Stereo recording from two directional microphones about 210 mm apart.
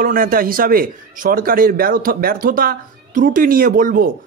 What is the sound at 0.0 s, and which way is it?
A man's voice, 40° right (ahead or behind).